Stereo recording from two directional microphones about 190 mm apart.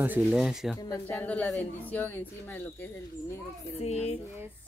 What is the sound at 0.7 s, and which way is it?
Speech, 15° left (ahead or behind).